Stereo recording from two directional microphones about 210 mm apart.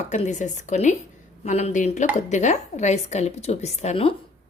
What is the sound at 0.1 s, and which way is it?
Speech, 35° left (ahead or behind).